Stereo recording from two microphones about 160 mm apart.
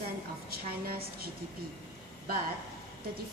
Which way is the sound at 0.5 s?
70° right (ahead or behind).